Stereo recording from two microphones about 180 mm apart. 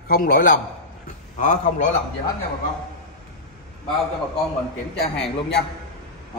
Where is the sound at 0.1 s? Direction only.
55° left (ahead or behind).